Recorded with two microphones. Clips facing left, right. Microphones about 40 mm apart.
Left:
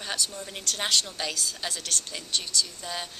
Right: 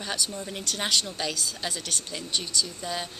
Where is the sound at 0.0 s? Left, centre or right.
Centre.